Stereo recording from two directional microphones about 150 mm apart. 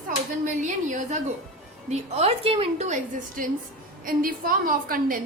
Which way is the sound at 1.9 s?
40° right (ahead or behind).